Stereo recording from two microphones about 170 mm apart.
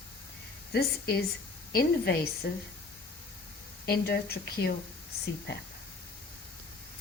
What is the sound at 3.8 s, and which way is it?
Speech, 65° left (ahead or behind).